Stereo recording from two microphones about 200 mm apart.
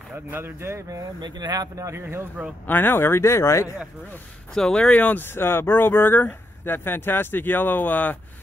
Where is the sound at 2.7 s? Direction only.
10° left (ahead or behind).